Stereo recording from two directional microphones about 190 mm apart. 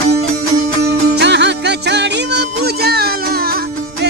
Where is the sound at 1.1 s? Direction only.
65° right (ahead or behind).